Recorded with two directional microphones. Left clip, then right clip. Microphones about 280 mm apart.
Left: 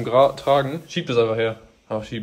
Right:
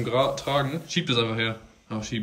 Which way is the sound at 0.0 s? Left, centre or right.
Centre.